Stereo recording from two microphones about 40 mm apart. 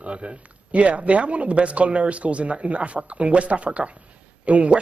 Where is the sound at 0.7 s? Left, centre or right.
Right.